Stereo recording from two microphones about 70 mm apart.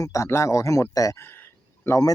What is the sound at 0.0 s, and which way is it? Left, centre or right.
Speech, left.